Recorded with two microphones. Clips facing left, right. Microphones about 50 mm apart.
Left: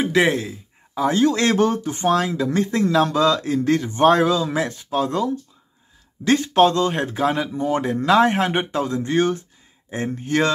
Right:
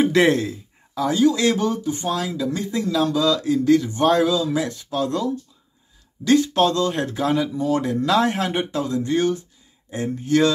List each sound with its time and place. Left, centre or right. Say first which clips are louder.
0.0 s speech: right 2 dB; centre
1.1 s speech: right 1 dB; left